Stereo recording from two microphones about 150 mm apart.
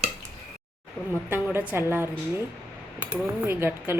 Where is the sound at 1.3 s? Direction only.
15° right (ahead or behind).